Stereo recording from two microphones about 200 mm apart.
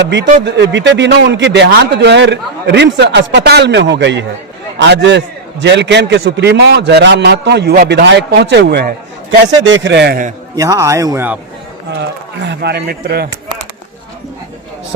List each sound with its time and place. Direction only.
0.4 s a man's voice: 60° right (ahead or behind)
9.6 s a man's voice: 65° right (ahead or behind); by 10.3 s 45° right (ahead or behind)
10.5 s a man's voice: 15° right (ahead or behind)
12.4 s speech: 55° right (ahead or behind)